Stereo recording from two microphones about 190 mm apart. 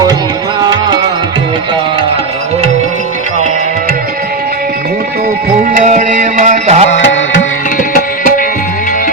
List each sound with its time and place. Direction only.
5.7 s music: 40° right (ahead or behind)